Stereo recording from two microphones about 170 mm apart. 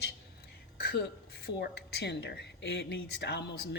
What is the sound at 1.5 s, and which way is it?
Speech, 75° left (ahead or behind).